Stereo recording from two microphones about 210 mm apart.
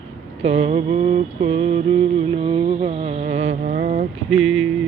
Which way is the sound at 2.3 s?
25° right (ahead or behind).